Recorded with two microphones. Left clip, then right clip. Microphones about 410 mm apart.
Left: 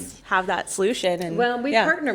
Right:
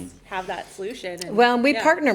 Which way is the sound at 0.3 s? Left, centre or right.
Left.